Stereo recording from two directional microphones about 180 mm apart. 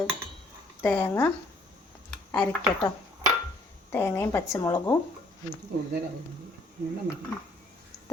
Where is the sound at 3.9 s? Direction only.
15° left (ahead or behind).